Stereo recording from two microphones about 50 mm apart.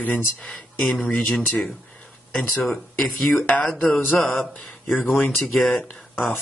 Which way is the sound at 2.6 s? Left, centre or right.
Centre.